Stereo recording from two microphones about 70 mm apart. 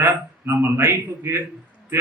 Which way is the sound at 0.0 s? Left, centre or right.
Right.